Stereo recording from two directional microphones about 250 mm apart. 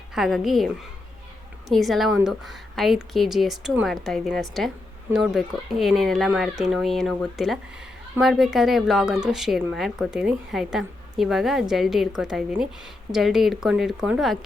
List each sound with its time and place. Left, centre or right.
0.1 s speech: centre
1.7 s speech: centre